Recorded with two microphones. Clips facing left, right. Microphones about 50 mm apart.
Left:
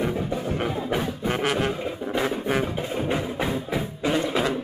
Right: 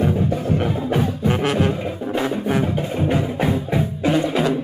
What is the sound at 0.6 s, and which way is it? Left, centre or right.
Music, centre.